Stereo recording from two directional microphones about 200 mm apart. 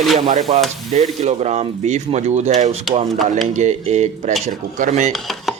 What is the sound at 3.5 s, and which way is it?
Speech, 35° right (ahead or behind).